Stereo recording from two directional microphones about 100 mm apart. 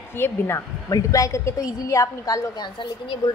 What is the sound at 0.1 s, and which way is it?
A woman's voice, 25° left (ahead or behind).